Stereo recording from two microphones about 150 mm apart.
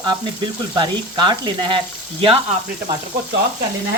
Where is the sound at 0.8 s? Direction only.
30° right (ahead or behind).